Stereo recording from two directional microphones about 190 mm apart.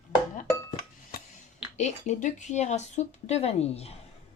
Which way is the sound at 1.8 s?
40° left (ahead or behind).